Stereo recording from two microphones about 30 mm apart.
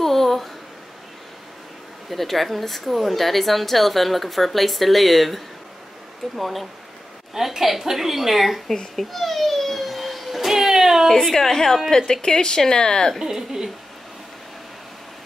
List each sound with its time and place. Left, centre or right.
0.0 s a sound: centre
2.0 s a woman's voice: centre
8.9 s a sound: centre
11.3 s a woman's voice: centre
12.1 s speech: left
13.2 s a woman's voice: centre